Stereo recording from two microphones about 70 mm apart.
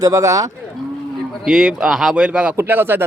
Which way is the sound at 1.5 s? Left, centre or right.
Centre.